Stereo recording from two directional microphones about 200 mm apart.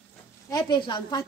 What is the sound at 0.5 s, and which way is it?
Speech, 20° left (ahead or behind).